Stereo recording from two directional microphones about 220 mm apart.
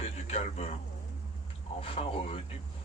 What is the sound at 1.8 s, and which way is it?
Speech, 25° left (ahead or behind).